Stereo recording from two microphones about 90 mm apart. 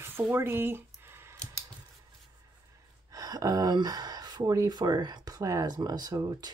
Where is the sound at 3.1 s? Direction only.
40° right (ahead or behind).